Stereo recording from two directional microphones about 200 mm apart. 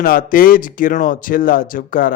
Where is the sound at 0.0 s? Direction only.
45° left (ahead or behind).